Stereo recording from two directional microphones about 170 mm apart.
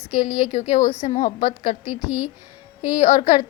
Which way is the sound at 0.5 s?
45° left (ahead or behind).